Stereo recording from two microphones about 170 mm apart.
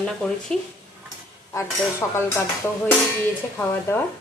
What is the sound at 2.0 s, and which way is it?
Speech, 15° left (ahead or behind).